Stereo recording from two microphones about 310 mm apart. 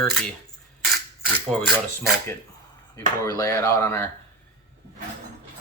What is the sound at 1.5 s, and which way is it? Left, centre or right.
Speech, centre.